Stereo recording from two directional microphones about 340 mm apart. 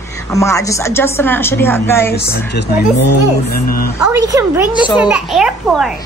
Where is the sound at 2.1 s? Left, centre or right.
Left.